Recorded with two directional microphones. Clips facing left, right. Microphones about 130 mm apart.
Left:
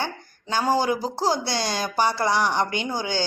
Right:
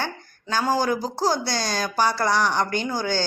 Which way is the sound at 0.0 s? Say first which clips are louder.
Even; 20° left (ahead or behind).